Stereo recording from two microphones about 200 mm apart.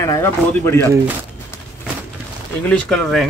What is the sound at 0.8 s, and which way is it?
Speech, 15° right (ahead or behind).